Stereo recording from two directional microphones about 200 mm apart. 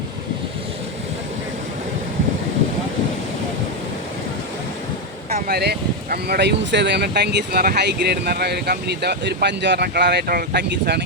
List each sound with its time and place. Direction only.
5.3 s speech: 50° right (ahead or behind)